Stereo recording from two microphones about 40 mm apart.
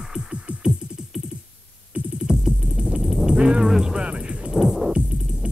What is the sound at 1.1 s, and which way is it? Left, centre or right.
Computer keyboard, centre.